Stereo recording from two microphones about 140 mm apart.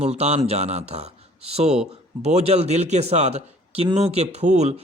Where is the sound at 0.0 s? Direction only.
50° right (ahead or behind).